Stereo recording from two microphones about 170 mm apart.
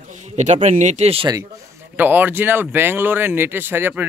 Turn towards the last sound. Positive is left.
turn(degrees=-15)  # may be behind; listen again after turning